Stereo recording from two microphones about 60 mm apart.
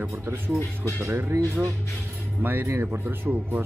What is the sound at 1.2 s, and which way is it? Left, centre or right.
Speech, right.